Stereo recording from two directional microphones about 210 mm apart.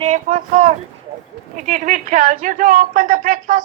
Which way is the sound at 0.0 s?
40° right (ahead or behind).